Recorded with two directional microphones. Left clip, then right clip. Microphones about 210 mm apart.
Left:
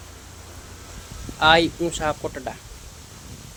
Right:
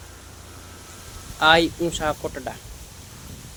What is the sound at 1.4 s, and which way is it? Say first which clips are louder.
Speech: even; centre (ahead or behind).